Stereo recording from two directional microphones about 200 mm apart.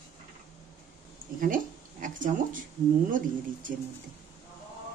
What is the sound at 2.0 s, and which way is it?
Speech, 40° right (ahead or behind).